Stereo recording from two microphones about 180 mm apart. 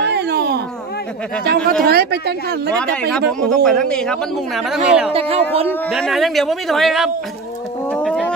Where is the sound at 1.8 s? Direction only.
60° right (ahead or behind).